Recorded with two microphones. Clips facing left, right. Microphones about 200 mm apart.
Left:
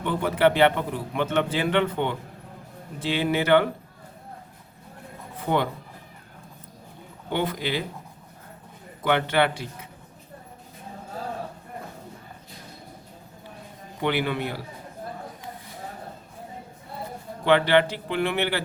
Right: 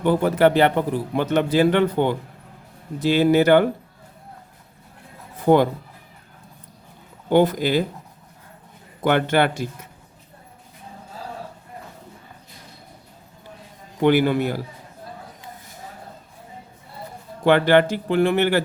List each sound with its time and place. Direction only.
0.0 s a man's voice: 40° right (ahead or behind)
7.3 s speech: 40° right (ahead or behind)
9.0 s speech: 45° right (ahead or behind)
14.0 s speech: 45° right (ahead or behind)
17.4 s speech: 45° right (ahead or behind)